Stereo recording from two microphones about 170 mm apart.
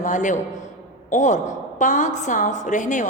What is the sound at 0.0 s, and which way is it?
A woman's voice, 45° left (ahead or behind).